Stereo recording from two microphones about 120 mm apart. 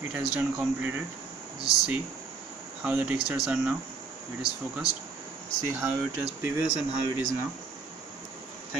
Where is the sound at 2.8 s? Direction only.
15° right (ahead or behind).